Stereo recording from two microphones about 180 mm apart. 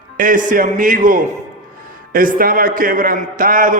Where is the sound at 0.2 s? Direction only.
50° right (ahead or behind).